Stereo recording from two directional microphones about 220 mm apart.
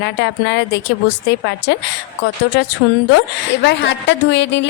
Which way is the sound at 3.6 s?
50° left (ahead or behind).